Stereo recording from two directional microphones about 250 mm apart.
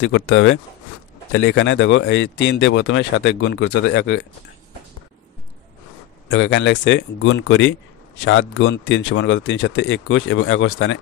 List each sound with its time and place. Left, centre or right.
0.0 s speech: left
6.2 s speech: left